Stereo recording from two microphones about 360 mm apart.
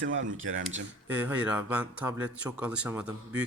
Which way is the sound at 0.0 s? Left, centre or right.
Right.